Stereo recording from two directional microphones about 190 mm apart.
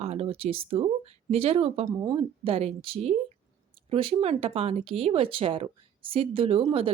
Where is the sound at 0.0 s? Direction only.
30° right (ahead or behind).